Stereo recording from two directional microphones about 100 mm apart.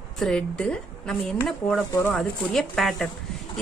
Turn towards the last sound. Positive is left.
turn(degrees=5)  # may be behind; listen again after turning